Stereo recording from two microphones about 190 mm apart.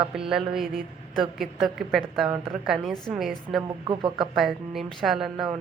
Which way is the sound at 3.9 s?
25° right (ahead or behind).